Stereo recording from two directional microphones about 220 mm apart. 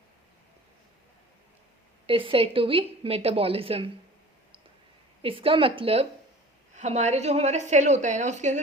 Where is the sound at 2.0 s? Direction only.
25° right (ahead or behind).